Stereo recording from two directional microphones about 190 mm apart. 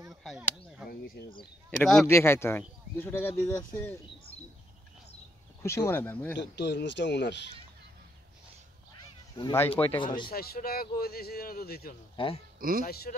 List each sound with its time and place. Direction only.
0.1 s a sound: centre (ahead or behind)
0.8 s speech: 50° left (ahead or behind)
1.8 s speech: 5° left (ahead or behind)
2.0 s speech: 15° left (ahead or behind)
5.6 s speech: 15° left (ahead or behind)
6.3 s speech: 65° left (ahead or behind)
8.9 s cat: 20° left (ahead or behind)
9.8 s speech: 10° left (ahead or behind)
10.3 s speech: 55° left (ahead or behind)
12.2 s speech: 25° left (ahead or behind)
12.5 s a man's voice: 50° right (ahead or behind)
12.8 s speech: 55° left (ahead or behind)